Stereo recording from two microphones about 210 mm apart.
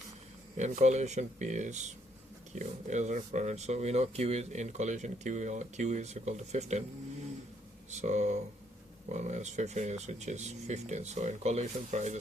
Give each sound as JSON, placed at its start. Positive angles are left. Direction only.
{"t": 0.5, "sound": "speech", "side_deg": -35}
{"t": 7.9, "sound": "speech", "side_deg": -35}